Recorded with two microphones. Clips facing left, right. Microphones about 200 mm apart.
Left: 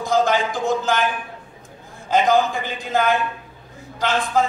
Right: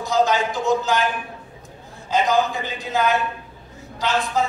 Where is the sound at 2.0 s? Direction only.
50° left (ahead or behind).